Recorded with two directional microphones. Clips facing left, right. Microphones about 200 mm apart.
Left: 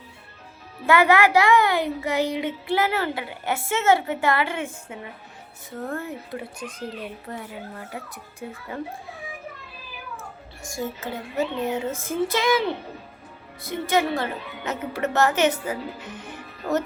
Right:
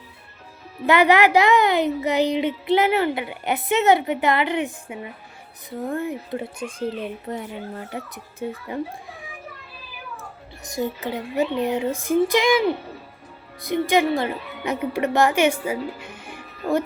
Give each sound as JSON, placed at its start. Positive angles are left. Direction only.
{"t": 0.9, "sound": "a woman's voice", "side_deg": -20}
{"t": 10.2, "sound": "a child's voice", "side_deg": -20}